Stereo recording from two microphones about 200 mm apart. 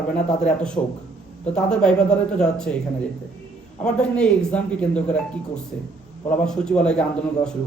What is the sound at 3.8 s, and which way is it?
Speech, 5° left (ahead or behind).